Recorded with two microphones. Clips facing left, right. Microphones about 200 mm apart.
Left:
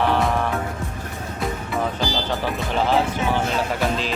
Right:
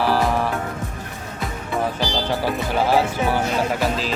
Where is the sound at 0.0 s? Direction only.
Centre (ahead or behind).